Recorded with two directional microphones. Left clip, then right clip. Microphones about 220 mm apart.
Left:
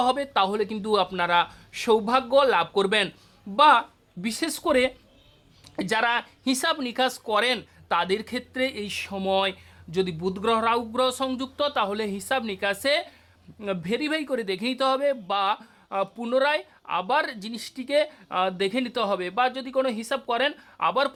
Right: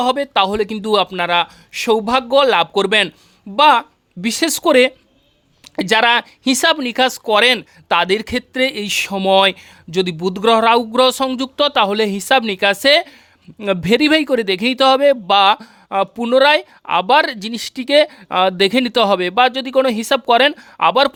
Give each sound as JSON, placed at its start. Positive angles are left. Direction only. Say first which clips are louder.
{"t": 0.0, "sound": "speech", "louder": "right 7 dB", "side_deg": -40}